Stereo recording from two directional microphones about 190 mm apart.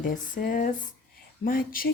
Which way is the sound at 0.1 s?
45° left (ahead or behind).